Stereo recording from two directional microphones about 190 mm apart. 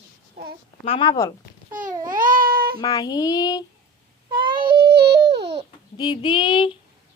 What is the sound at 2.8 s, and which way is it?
Speech, 20° left (ahead or behind).